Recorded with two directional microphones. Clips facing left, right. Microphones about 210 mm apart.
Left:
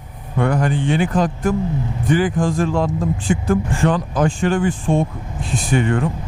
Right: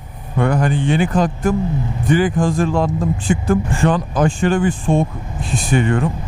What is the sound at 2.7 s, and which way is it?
Speech, 20° right (ahead or behind).